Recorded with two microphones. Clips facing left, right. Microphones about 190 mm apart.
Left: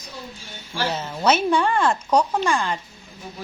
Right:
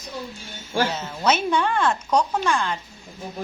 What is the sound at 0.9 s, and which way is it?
Speech, 10° left (ahead or behind).